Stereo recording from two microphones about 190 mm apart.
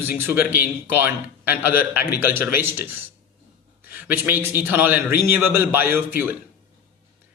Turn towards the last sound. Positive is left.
turn(degrees=-10)  # may be behind; listen again after turning